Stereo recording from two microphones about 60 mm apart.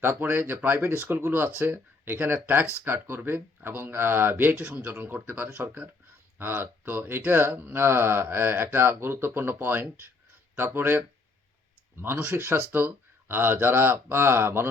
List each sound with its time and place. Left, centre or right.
0.2 s speech: right
6.4 s speech: right